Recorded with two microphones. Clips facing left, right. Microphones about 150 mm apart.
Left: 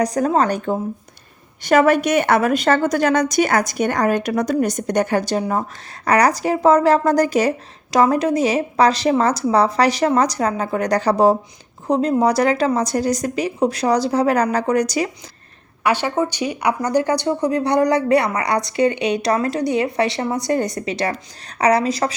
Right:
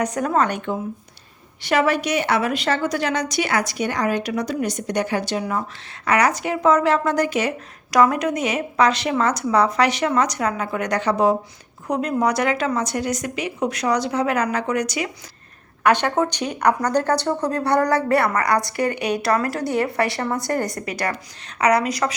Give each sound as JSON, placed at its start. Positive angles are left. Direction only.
{"t": 0.0, "sound": "a woman's voice", "side_deg": 35}
{"t": 15.8, "sound": "a woman's voice", "side_deg": 5}